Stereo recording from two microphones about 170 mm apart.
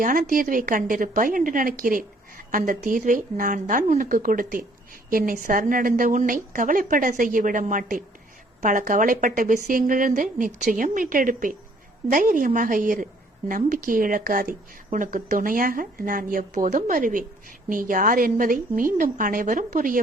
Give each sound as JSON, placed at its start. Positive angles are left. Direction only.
{"t": 0.0, "sound": "a woman's voice", "side_deg": -55}